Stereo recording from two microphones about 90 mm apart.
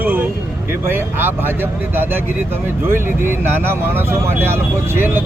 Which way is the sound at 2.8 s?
25° right (ahead or behind).